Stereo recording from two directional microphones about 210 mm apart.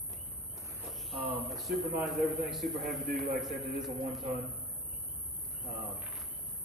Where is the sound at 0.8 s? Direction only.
5° left (ahead or behind).